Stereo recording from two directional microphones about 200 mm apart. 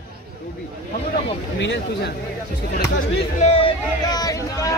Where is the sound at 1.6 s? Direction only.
60° left (ahead or behind).